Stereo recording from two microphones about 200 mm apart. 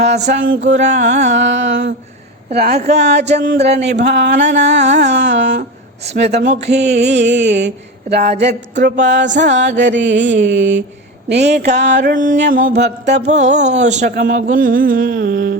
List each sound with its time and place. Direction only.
0.5 s mantra: 65° right (ahead or behind)
2.6 s speech: 50° right (ahead or behind)
2.9 s mantra: 55° right (ahead or behind)
4.5 s music: 60° right (ahead or behind)
6.1 s mantra: 60° right (ahead or behind)
8.1 s speech: 50° right (ahead or behind)
8.8 s mantra: 60° right (ahead or behind)
12.1 s speech: 40° right (ahead or behind)
12.5 s mantra: 40° right (ahead or behind)